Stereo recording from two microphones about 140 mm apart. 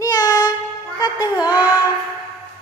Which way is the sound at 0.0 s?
30° left (ahead or behind).